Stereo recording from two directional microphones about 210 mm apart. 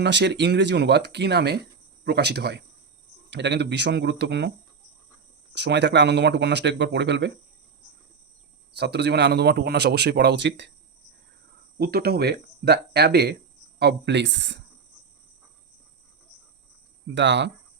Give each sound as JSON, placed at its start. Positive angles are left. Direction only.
{"t": 0.0, "sound": "speech", "side_deg": -55}
{"t": 5.5, "sound": "speech", "side_deg": -55}
{"t": 8.7, "sound": "speech", "side_deg": -55}
{"t": 11.8, "sound": "speech", "side_deg": -45}
{"t": 17.2, "sound": "speech", "side_deg": -55}